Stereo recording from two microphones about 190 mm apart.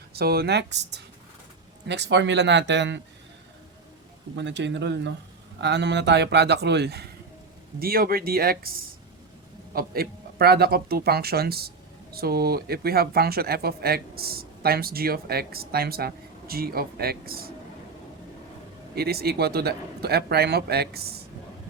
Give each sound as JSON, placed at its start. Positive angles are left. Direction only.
{"t": 0.1, "sound": "speech", "side_deg": -55}
{"t": 4.4, "sound": "speech", "side_deg": -65}
{"t": 18.9, "sound": "speech", "side_deg": -55}